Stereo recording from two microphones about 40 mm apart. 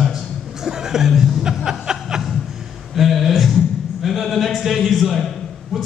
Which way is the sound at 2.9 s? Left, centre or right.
Centre.